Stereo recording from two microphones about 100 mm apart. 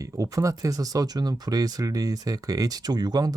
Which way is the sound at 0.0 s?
35° right (ahead or behind).